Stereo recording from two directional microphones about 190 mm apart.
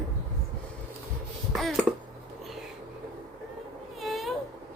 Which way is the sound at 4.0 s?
Centre (ahead or behind).